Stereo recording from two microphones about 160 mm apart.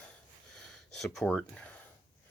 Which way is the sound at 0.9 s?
Centre (ahead or behind).